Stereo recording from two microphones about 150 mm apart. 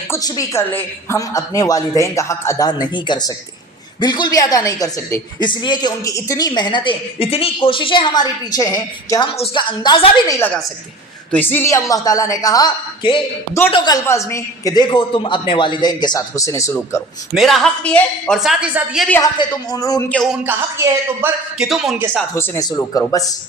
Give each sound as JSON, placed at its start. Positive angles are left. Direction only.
{"t": 0.1, "sound": "a woman's voice", "side_deg": 25}
{"t": 10.4, "sound": "a woman's voice", "side_deg": 10}
{"t": 17.3, "sound": "a woman's voice", "side_deg": 0}
{"t": 19.2, "sound": "a woman's voice", "side_deg": 25}
{"t": 20.1, "sound": "a woman's voice", "side_deg": 5}
{"t": 20.4, "sound": "a woman's voice", "side_deg": -15}
{"t": 21.6, "sound": "a woman's voice", "side_deg": 0}
{"t": 22.4, "sound": "a woman's voice", "side_deg": 20}